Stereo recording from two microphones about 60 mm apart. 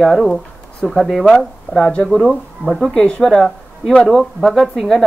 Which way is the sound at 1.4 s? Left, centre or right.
Centre.